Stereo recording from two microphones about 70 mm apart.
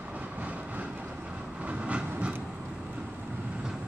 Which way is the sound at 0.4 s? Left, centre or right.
Right.